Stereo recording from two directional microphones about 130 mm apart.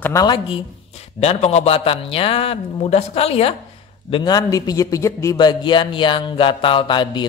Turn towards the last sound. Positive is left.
turn(degrees=35)  # may be behind; listen again after turning